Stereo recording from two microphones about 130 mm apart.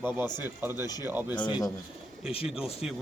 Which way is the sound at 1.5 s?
35° left (ahead or behind).